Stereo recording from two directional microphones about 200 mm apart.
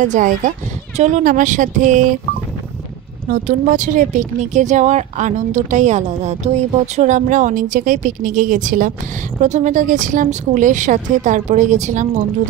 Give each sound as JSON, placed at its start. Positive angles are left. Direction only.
{"t": 0.0, "sound": "speech", "side_deg": -40}
{"t": 3.3, "sound": "speech", "side_deg": -40}